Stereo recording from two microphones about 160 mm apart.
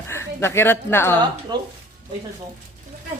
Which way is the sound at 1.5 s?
25° right (ahead or behind).